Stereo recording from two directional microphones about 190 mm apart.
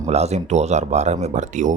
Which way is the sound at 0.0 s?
35° right (ahead or behind).